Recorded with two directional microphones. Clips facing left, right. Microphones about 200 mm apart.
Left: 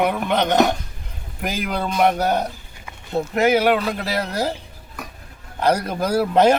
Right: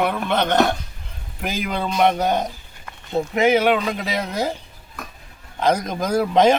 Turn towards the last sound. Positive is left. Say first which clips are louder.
# even
turn(degrees=5)  # may be behind; listen again after turning